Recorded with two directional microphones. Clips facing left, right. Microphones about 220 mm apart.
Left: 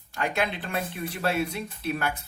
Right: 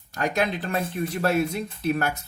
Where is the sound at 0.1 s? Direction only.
40° right (ahead or behind).